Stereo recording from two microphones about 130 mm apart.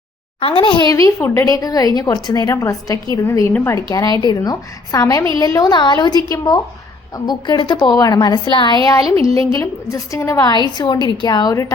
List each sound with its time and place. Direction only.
0.3 s a woman's voice: 45° left (ahead or behind); by 3.8 s 20° left (ahead or behind)
3.8 s a woman's voice: 30° left (ahead or behind)
10.8 s a woman's voice: 35° left (ahead or behind)